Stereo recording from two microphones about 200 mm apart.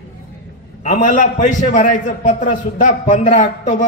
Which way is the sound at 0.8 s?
40° left (ahead or behind).